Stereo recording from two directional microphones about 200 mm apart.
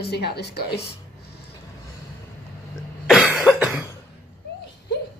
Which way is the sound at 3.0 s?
Centre (ahead or behind).